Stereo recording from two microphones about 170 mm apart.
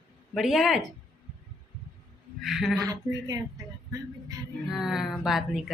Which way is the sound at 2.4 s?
Centre (ahead or behind).